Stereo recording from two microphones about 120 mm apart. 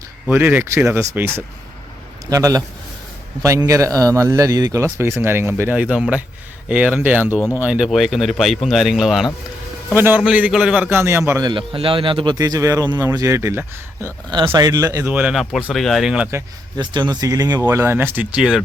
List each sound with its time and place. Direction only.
0.3 s speech: 15° right (ahead or behind)
2.3 s a man's voice: 30° right (ahead or behind); by 9.3 s 5° right (ahead or behind)
9.9 s speech: 15° right (ahead or behind)
10.8 s speech: 20° right (ahead or behind)
11.5 s speech: 45° right (ahead or behind); by 14.1 s 20° right (ahead or behind)
14.3 s speech: 40° right (ahead or behind)
14.7 s speech: 25° right (ahead or behind)
15.1 s speech: 10° right (ahead or behind)
15.7 s a man's voice: centre (ahead or behind)
16.7 s speech: 40° right (ahead or behind)
17.7 s speech: 20° right (ahead or behind)